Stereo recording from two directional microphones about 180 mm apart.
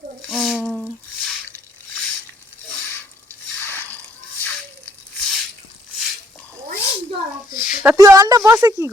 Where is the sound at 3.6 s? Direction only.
10° left (ahead or behind).